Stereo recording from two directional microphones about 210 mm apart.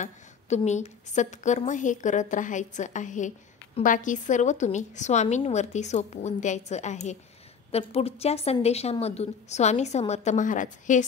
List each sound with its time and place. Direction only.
0.0 s a woman's voice: 35° left (ahead or behind)